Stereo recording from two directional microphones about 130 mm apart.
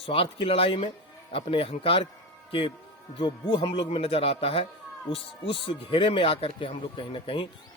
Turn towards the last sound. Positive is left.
turn(degrees=40)  # may be behind; listen again after turning